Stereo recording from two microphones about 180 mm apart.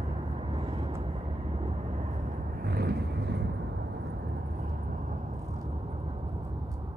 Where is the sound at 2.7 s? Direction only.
65° right (ahead or behind).